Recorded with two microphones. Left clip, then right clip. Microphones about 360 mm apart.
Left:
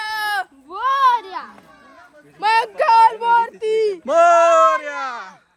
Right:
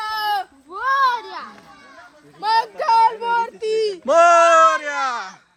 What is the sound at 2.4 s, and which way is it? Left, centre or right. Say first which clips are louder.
A child's voice: left 3 dB; left.